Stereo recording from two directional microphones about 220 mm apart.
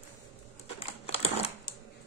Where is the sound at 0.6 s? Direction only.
25° left (ahead or behind).